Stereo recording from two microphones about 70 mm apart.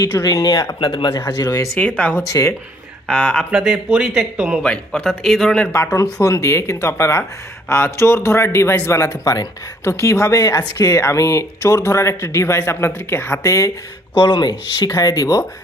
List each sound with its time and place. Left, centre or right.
0.0 s speech: left
0.6 s speech: left
1.8 s speech: centre
2.3 s speech: left
3.1 s a man's voice: centre
3.5 s speech: centre
4.6 s a man's voice: centre
5.7 s speech: left
9.8 s speech: left
13.4 s speech: left
14.3 s speech: left
14.8 s speech: left